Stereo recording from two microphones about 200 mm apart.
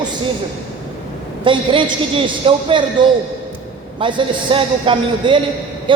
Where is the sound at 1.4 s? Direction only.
25° right (ahead or behind).